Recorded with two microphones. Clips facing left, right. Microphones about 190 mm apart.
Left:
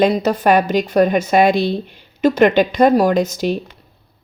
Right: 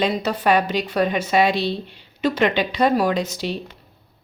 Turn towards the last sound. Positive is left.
turn(degrees=45)  # may be behind; listen again after turning